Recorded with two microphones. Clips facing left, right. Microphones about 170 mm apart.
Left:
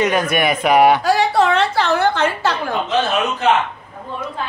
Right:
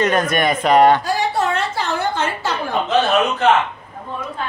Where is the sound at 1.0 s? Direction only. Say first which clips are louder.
Left 4 dB; 85° left.